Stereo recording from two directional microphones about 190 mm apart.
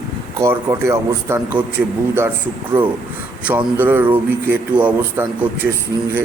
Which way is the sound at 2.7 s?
10° right (ahead or behind).